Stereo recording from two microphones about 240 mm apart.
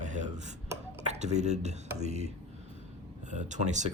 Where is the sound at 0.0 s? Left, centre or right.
Right.